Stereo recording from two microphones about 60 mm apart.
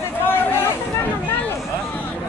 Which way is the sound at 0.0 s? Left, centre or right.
Left.